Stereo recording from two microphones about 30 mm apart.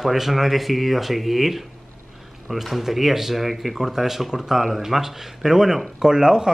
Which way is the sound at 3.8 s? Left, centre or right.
Centre.